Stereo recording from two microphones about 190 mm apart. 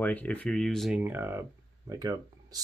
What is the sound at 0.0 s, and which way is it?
Speech, 10° left (ahead or behind).